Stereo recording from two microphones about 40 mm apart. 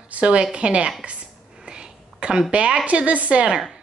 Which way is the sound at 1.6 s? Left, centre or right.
Right.